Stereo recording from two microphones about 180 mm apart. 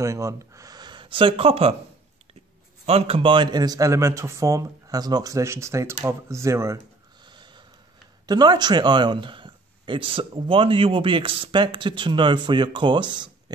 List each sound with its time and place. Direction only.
0.0 s speech: 15° right (ahead or behind); by 1.8 s 35° right (ahead or behind)
2.8 s speech: 35° right (ahead or behind); by 6.8 s 15° right (ahead or behind)
7.2 s snort: 25° right (ahead or behind)
8.3 s speech: 25° right (ahead or behind)